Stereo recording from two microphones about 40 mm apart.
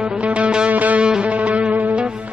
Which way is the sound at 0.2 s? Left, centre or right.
Right.